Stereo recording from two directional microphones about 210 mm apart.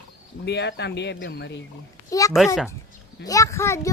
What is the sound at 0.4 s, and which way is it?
Speech, 55° left (ahead or behind).